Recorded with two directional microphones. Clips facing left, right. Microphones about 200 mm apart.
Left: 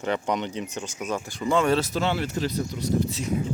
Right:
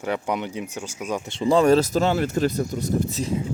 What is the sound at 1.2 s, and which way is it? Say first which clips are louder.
Speech: right 6 dB; 25° right (ahead or behind).